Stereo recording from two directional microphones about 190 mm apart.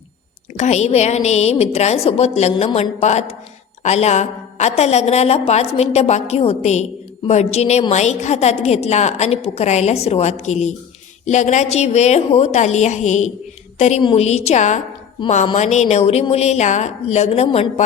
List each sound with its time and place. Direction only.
0.5 s a woman's voice: 35° left (ahead or behind)
2.6 s a woman's voice: 25° left (ahead or behind)
3.0 s a woman's voice: 35° left (ahead or behind)